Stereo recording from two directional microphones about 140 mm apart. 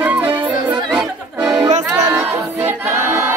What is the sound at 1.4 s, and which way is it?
Music, 30° right (ahead or behind).